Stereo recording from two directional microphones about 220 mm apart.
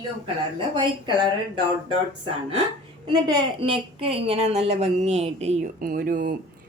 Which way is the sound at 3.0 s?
25° right (ahead or behind).